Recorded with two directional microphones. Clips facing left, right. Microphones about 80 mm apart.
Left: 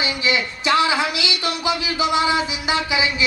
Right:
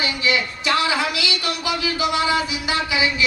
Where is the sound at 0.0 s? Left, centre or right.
Left.